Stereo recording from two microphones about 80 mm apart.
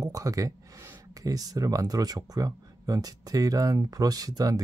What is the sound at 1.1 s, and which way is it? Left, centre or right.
Speech, right.